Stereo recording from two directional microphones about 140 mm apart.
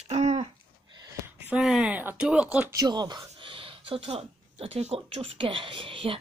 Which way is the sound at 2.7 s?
30° right (ahead or behind).